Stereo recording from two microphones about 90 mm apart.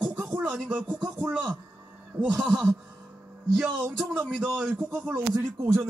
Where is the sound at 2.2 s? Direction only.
Centre (ahead or behind).